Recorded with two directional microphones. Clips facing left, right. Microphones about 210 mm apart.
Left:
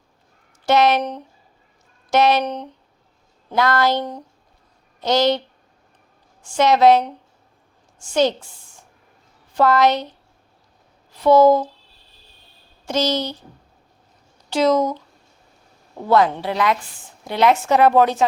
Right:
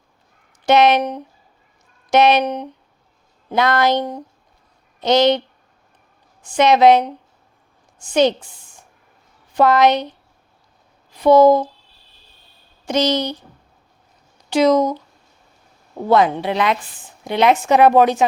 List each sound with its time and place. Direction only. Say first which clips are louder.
0.6 s speech: right 3 dB; 20° right (ahead or behind)
6.4 s a woman's voice: right 2 dB; 15° right (ahead or behind)
11.2 s speech: right 2 dB; 15° right (ahead or behind)
12.8 s speech: right 3 dB; 15° right (ahead or behind)
14.5 s speech: right 3 dB; 15° right (ahead or behind)
16.0 s speech: right 2 dB; 20° right (ahead or behind)